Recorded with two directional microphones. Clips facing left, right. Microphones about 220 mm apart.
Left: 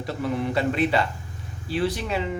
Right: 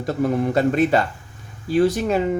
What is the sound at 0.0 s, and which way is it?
Speech, 45° right (ahead or behind).